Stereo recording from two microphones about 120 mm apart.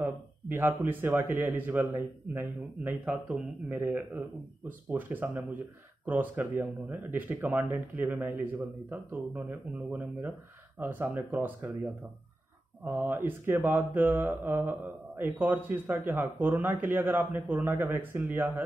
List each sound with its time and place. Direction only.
0.0 s a man's voice: 20° right (ahead or behind)
2.9 s a man's voice: 5° right (ahead or behind)
12.8 s a man's voice: 20° right (ahead or behind)